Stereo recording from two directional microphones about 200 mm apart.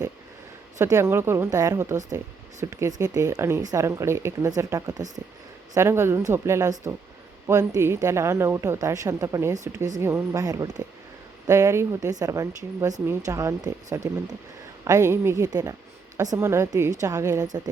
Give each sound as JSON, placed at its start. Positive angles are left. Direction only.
{"t": 0.8, "sound": "speech", "side_deg": -15}